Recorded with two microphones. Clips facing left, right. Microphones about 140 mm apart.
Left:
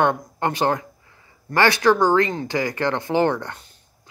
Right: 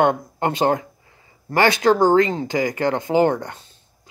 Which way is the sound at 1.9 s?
50° right (ahead or behind).